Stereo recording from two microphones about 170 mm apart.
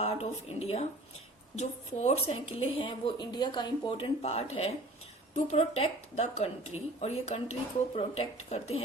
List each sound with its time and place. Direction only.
0.0 s a woman's voice: 35° left (ahead or behind)